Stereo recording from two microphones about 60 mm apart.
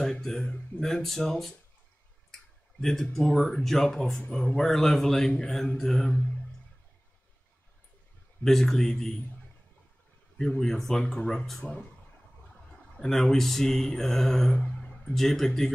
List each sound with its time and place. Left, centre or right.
0.0 s a sound: centre
0.8 s speech: centre
2.8 s speech: centre
3.3 s mantra: centre
3.6 s mantra: centre
4.6 s mantra: centre
5.9 s speech: centre
8.5 s mantra: centre
10.3 s mantra: centre
12.9 s mantra: centre
14.7 s a sound: centre
15.1 s speech: centre